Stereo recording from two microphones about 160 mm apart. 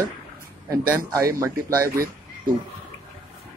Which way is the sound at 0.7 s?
20° right (ahead or behind).